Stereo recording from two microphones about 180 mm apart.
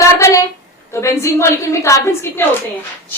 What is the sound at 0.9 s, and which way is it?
A woman's voice, 15° left (ahead or behind).